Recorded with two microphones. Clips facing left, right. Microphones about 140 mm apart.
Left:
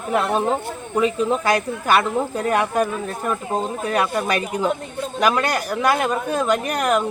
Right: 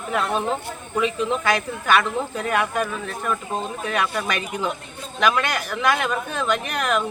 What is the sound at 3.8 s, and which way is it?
Speech, 35° left (ahead or behind).